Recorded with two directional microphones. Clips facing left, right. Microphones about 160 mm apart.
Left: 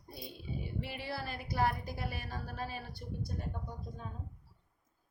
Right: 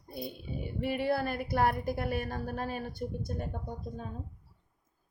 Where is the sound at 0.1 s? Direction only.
55° right (ahead or behind).